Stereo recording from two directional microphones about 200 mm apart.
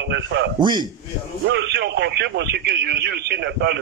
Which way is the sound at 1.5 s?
60° right (ahead or behind).